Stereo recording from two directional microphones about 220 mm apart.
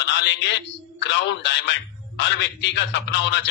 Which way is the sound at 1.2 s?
55° left (ahead or behind).